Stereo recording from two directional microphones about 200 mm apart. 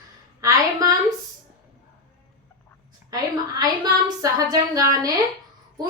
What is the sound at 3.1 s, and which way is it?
A woman's voice, 20° right (ahead or behind).